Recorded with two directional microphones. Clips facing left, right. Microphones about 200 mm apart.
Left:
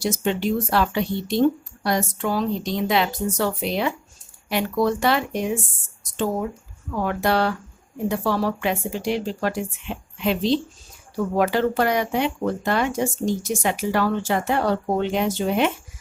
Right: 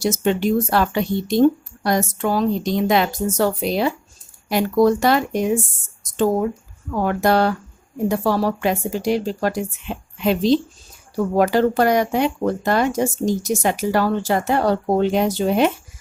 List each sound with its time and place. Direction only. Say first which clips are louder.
0.0 s speech: right 4 dB; 45° right (ahead or behind)